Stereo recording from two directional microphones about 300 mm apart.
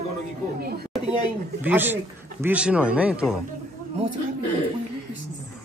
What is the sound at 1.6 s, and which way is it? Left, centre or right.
Speech, centre.